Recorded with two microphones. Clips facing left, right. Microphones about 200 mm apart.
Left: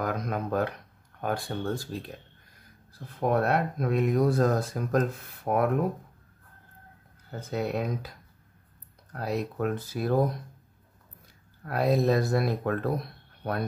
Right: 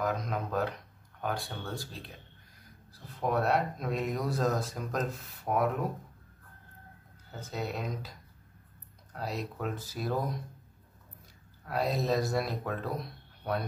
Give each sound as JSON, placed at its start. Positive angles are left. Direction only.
{"t": 0.0, "sound": "a sound", "side_deg": 55}
{"t": 1.2, "sound": "speech", "side_deg": 50}
{"t": 7.3, "sound": "speech", "side_deg": 60}
{"t": 9.1, "sound": "speech", "side_deg": 55}
{"t": 11.6, "sound": "speech", "side_deg": 55}